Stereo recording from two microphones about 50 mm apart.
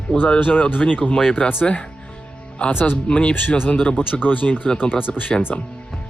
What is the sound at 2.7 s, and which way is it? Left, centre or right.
Speech, left.